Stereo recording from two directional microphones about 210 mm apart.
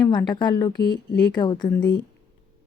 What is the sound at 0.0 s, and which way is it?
Speech, 20° left (ahead or behind).